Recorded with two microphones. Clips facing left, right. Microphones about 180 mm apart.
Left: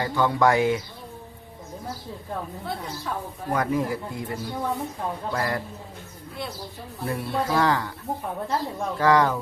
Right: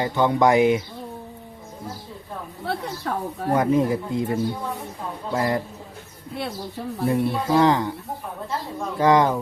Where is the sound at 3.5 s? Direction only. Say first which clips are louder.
Right 5 dB; 20° right (ahead or behind).